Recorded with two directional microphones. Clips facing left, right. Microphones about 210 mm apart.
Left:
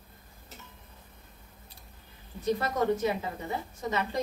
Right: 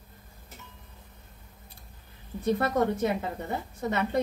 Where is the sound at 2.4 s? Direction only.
60° right (ahead or behind).